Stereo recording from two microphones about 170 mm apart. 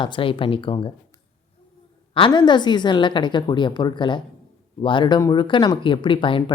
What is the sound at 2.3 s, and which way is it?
Speech, 25° left (ahead or behind).